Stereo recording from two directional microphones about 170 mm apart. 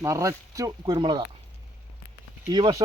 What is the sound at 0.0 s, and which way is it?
Speech, 20° right (ahead or behind).